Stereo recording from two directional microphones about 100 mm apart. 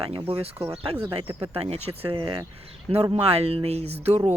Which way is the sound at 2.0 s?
55° right (ahead or behind).